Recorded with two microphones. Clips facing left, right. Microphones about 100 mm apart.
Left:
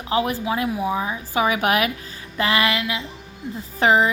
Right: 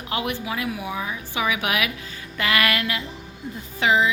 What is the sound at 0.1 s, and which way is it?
A woman's voice, 35° left (ahead or behind).